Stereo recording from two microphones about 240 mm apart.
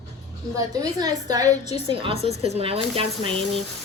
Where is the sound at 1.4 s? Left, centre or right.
Left.